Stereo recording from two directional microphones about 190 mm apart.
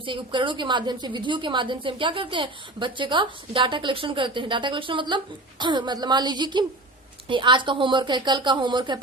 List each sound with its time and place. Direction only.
0.0 s a woman's voice: 25° right (ahead or behind)